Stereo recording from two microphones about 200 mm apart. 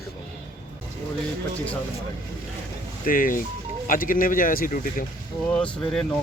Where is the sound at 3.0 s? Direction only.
45° left (ahead or behind).